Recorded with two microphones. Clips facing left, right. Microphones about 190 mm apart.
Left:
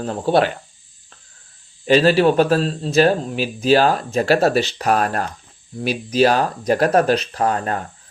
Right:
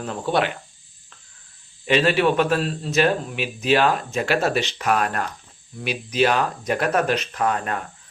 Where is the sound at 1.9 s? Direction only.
35° left (ahead or behind).